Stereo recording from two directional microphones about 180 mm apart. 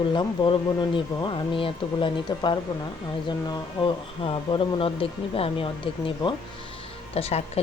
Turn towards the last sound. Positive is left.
turn(degrees=35)  # may be behind; listen again after turning